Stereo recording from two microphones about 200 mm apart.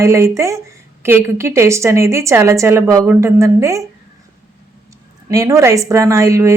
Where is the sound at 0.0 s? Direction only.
15° right (ahead or behind).